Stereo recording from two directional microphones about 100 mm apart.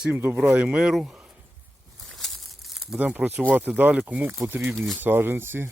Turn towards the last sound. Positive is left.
turn(degrees=-25)  # may be behind; listen again after turning